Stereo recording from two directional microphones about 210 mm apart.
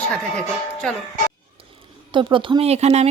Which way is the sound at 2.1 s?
25° right (ahead or behind).